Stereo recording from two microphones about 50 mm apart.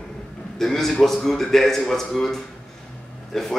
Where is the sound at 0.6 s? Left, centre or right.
Centre.